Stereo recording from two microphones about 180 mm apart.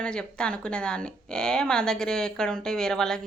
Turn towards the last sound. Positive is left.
turn(degrees=5)  # may be behind; listen again after turning